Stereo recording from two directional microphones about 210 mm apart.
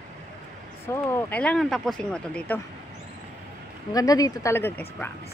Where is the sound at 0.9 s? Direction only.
10° left (ahead or behind).